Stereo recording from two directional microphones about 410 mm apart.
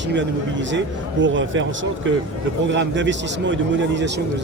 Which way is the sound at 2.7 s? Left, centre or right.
Right.